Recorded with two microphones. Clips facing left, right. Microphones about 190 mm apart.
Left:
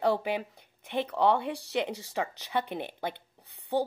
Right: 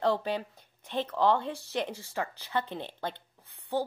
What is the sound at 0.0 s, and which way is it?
Speech, 15° left (ahead or behind).